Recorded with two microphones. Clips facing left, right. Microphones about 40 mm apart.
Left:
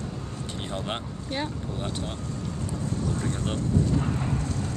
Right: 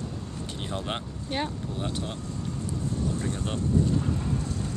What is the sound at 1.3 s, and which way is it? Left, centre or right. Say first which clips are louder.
Speech: right 1 dB; centre.